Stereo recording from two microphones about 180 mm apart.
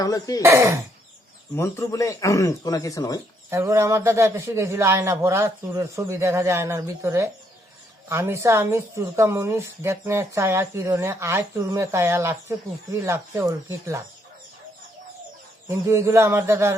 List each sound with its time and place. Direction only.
0.0 s speech: 20° left (ahead or behind)
0.4 s a woman's voice: 15° right (ahead or behind)
1.5 s speech: 15° left (ahead or behind)
3.5 s a woman's voice: 15° right (ahead or behind)
15.7 s a woman's voice: 15° right (ahead or behind)